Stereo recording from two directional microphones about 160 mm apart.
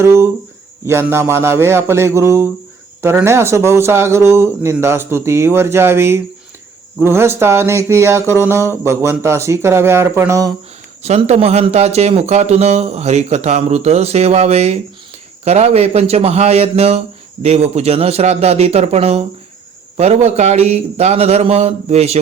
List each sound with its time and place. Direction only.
0.0 s speech: 15° right (ahead or behind)
11.3 s a man's voice: 45° right (ahead or behind)